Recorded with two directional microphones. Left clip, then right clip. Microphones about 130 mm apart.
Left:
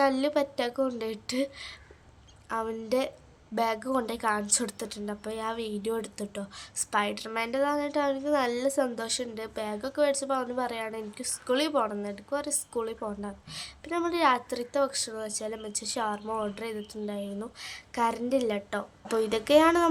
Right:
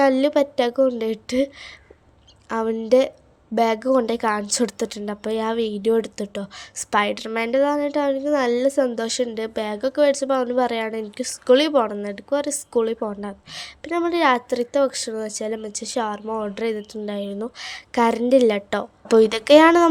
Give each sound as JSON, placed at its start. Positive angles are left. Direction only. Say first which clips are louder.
{"t": 0.0, "sound": "a woman's voice", "louder": "right 8 dB", "side_deg": -50}
{"t": 2.5, "sound": "a woman's voice", "louder": "right 11 dB", "side_deg": -55}
{"t": 16.6, "sound": "a woman's voice", "louder": "right 10 dB", "side_deg": -55}